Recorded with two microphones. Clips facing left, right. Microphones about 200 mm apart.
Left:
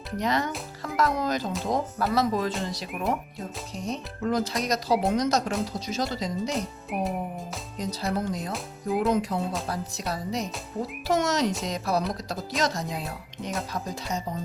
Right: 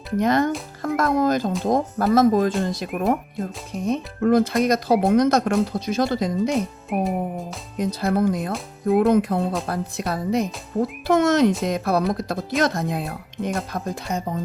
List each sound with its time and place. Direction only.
0.2 s speech: 50° right (ahead or behind)